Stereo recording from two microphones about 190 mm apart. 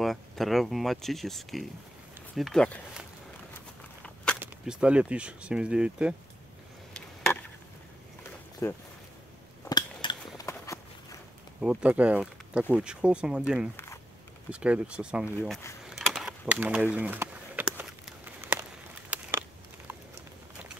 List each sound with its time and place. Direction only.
0.0 s speech: centre (ahead or behind)
4.0 s walk: 5° left (ahead or behind)
4.4 s speech: 5° right (ahead or behind)
8.6 s speech: 10° left (ahead or behind)
9.7 s a sound: 20° left (ahead or behind)
11.6 s speech: 5° right (ahead or behind)
14.5 s speech: 5° right (ahead or behind)
15.8 s a sound: centre (ahead or behind)